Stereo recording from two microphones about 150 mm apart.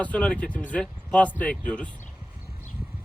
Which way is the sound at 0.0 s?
10° left (ahead or behind).